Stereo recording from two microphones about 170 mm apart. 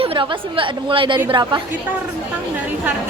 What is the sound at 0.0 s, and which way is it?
A woman's voice, 30° right (ahead or behind).